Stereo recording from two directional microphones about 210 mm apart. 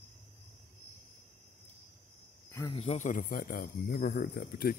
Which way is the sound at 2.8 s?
35° left (ahead or behind).